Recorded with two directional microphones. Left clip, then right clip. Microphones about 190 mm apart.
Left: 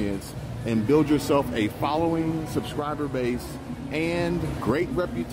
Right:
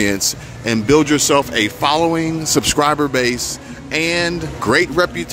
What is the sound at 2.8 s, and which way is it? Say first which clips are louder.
Speech: right 14 dB; 25° right (ahead or behind).